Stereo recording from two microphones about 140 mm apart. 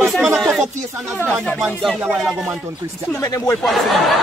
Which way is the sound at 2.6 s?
20° right (ahead or behind).